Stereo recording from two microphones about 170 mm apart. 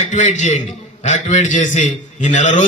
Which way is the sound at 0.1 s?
45° left (ahead or behind).